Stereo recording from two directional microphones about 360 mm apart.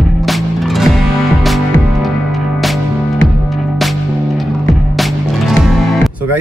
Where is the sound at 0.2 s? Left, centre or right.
Centre.